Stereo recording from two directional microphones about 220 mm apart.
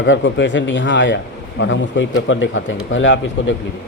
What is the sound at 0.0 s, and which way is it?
A man's voice, 55° left (ahead or behind).